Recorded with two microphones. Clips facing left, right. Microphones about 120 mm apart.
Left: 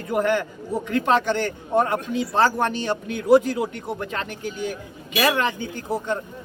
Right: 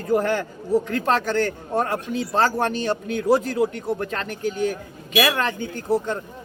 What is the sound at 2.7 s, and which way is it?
A man's voice, 40° right (ahead or behind).